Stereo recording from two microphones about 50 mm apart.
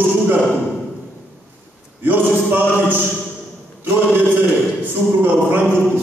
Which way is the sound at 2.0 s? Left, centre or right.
Right.